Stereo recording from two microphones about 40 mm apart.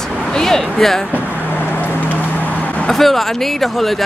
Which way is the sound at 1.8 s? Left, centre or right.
Left.